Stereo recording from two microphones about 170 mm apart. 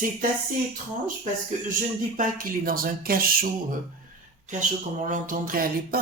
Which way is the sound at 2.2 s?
55° right (ahead or behind).